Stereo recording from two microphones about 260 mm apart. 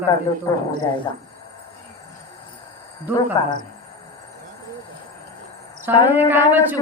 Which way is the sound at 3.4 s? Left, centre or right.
Centre.